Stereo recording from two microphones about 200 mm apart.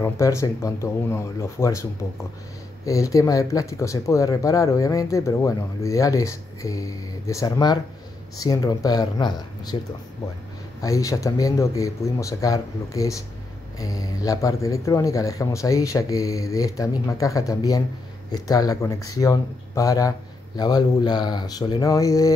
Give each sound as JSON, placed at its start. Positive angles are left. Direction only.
{"t": 0.0, "sound": "speech", "side_deg": 15}
{"t": 10.8, "sound": "speech", "side_deg": 15}